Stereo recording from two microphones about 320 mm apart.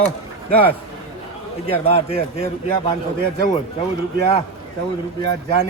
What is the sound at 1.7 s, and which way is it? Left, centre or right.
Speech, centre.